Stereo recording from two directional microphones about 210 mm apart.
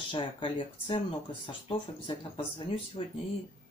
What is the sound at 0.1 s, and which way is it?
Speech, 25° left (ahead or behind).